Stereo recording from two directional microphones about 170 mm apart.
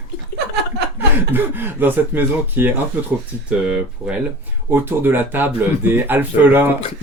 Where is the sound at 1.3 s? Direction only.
10° right (ahead or behind).